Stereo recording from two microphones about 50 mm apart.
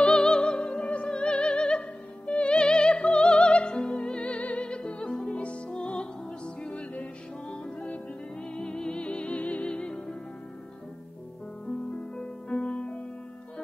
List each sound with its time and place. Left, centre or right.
0.0 s music: centre
12.2 s music: left